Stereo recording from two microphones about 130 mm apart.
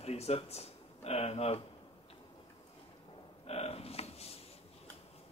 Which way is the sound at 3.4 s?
50° left (ahead or behind).